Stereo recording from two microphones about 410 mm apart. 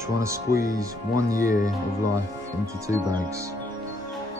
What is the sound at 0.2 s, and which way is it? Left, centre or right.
Speech, centre.